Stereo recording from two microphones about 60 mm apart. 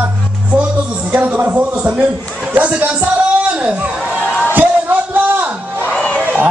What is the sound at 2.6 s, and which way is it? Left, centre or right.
Music, right.